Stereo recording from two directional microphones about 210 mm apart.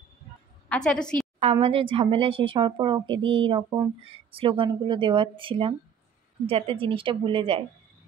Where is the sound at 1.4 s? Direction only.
25° right (ahead or behind).